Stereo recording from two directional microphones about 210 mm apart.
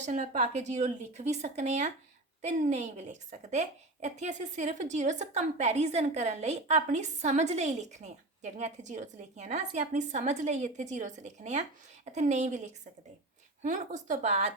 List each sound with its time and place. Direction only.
0.0 s a woman's voice: 35° right (ahead or behind)